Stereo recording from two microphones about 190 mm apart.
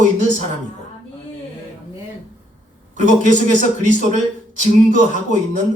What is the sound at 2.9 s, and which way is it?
A man's voice, 40° right (ahead or behind).